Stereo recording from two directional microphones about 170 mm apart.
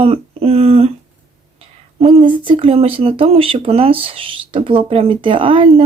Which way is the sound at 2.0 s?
35° right (ahead or behind).